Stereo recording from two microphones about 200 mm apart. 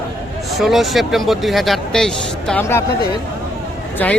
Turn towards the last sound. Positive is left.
turn(degrees=10)  # may be behind; listen again after turning